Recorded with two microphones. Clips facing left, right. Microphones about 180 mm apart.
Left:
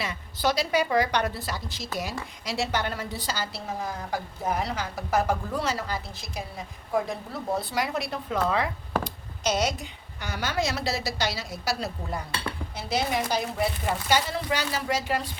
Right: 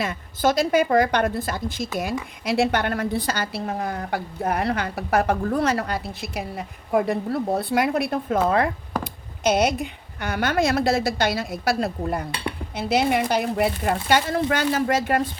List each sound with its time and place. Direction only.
0.0 s a woman's voice: 50° right (ahead or behind)